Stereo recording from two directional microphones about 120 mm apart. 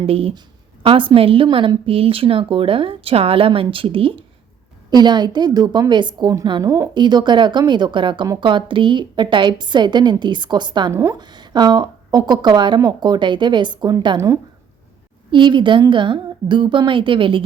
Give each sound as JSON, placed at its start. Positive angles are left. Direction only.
{"t": 0.0, "sound": "a woman's voice", "side_deg": -50}
{"t": 4.9, "sound": "speech", "side_deg": -35}
{"t": 10.9, "sound": "a woman's voice", "side_deg": -25}
{"t": 11.2, "sound": "speech", "side_deg": -35}
{"t": 15.3, "sound": "a woman's voice", "side_deg": -40}